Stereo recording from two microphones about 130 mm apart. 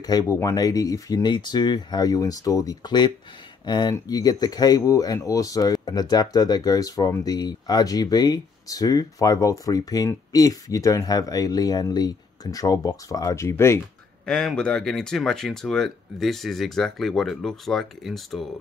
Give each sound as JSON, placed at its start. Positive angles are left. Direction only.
{"t": 0.0, "sound": "speech", "side_deg": 25}
{"t": 14.2, "sound": "speech", "side_deg": 5}